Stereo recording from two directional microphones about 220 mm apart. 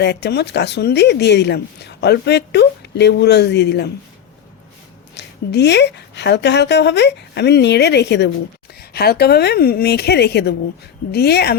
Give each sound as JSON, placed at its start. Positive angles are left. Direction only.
{"t": 0.0, "sound": "speech", "side_deg": 50}
{"t": 5.1, "sound": "speech", "side_deg": 50}